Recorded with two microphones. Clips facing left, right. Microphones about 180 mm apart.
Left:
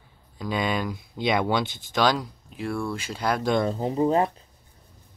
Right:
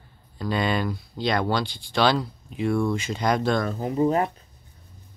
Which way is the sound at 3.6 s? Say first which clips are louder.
Even; 25° left (ahead or behind).